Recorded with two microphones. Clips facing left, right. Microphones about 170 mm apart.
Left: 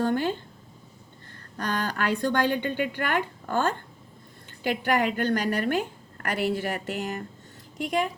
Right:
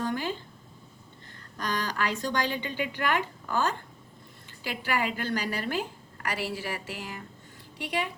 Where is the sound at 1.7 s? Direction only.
55° left (ahead or behind).